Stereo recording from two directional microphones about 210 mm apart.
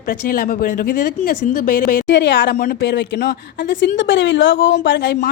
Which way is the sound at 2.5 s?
45° left (ahead or behind).